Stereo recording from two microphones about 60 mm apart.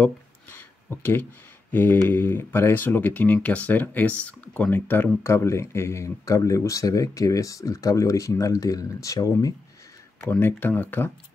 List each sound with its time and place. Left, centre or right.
0.0 s a sound: left
1.7 s speech: left
4.7 s speech: left
5.2 s speech: left
10.4 s speech: left